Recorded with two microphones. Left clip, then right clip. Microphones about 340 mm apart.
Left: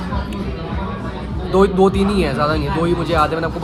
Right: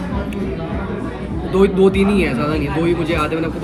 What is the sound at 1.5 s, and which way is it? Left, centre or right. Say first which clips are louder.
Speech: even; centre.